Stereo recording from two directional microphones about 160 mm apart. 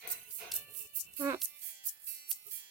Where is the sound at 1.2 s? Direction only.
20° right (ahead or behind).